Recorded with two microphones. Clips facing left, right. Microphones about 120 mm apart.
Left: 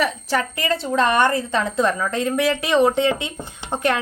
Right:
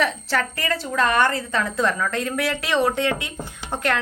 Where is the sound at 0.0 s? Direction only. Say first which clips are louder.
Left 1 dB; 15° left (ahead or behind).